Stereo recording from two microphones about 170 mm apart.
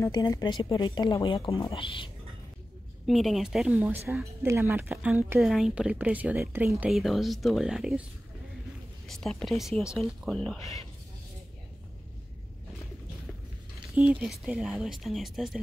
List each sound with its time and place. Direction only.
0.0 s speech: 20° left (ahead or behind)
3.1 s speech: centre (ahead or behind)
5.4 s a woman's voice: centre (ahead or behind)
9.0 s a woman's voice: 5° left (ahead or behind)
14.2 s a woman's voice: centre (ahead or behind)